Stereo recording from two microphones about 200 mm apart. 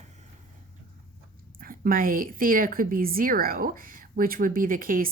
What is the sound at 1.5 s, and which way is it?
A woman's voice, 45° right (ahead or behind).